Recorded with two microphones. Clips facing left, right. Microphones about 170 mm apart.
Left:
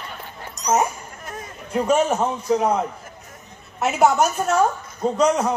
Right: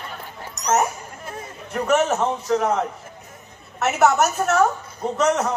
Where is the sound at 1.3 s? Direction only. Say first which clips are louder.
Even; 30° right (ahead or behind).